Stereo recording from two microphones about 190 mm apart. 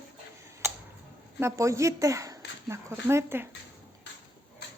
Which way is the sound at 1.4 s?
15° right (ahead or behind).